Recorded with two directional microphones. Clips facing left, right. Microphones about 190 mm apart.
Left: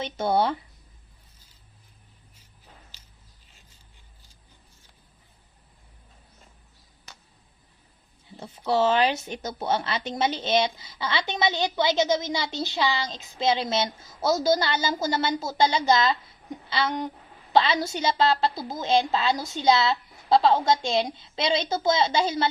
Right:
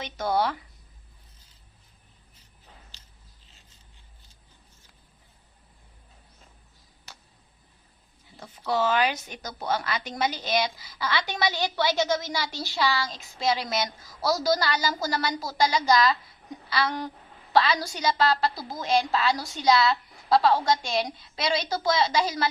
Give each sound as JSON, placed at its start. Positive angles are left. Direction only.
{"t": 0.0, "sound": "speech", "side_deg": 25}
{"t": 8.4, "sound": "speech", "side_deg": 25}